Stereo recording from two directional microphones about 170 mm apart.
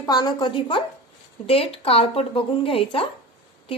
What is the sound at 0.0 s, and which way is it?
A woman's voice, 25° left (ahead or behind).